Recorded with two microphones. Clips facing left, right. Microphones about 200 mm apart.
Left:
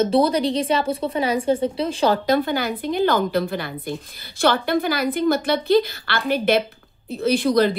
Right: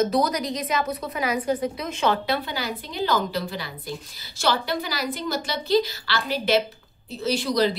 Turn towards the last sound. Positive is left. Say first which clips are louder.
# left 5 dB
turn(degrees=55)  # may be behind; listen again after turning